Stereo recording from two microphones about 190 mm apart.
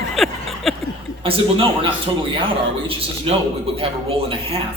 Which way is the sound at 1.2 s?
30° right (ahead or behind).